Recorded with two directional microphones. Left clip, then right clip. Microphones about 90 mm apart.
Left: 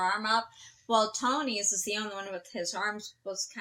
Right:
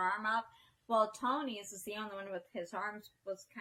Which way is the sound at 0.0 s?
20° left (ahead or behind).